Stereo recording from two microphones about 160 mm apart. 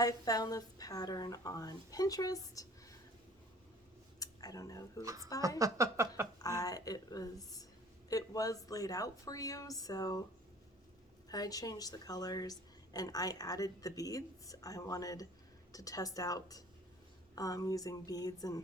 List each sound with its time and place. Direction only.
0.0 s a woman's voice: 25° left (ahead or behind)
4.2 s speech: 20° left (ahead or behind)
5.0 s speech: 20° right (ahead or behind)
6.4 s a woman's voice: 20° left (ahead or behind)
11.3 s a woman's voice: 25° left (ahead or behind)